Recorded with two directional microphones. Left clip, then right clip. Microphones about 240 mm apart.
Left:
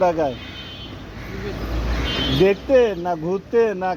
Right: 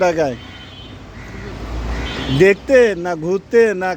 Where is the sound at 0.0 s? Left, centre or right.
Right.